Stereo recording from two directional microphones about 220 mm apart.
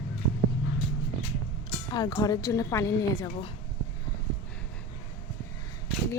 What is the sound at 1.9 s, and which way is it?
Speech, 20° left (ahead or behind).